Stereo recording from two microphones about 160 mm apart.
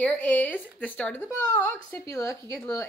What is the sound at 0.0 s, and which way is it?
A woman's voice, 10° left (ahead or behind).